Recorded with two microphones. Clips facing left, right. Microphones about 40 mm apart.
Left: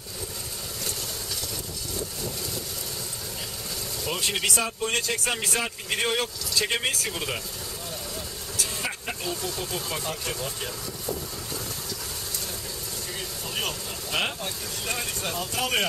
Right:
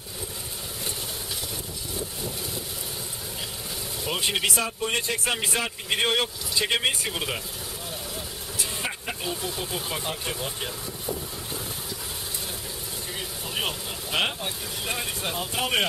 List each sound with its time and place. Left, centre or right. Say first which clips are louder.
2.0 s vehicle: even; centre
4.0 s speech: right 2 dB; centre
8.8 s speech: right 1 dB; centre
13.6 s speech: right 2 dB; centre